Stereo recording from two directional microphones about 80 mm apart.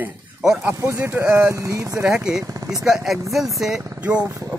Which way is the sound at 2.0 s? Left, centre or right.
Centre.